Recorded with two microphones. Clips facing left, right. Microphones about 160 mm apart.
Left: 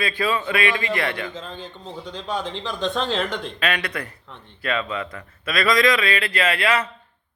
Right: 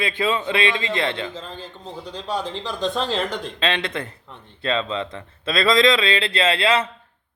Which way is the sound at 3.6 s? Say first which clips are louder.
Right 2 dB; 25° right (ahead or behind).